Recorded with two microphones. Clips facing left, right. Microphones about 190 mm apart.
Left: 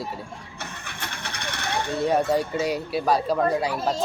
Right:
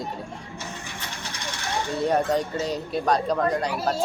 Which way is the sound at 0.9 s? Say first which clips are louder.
Left 1 dB; 60° left (ahead or behind).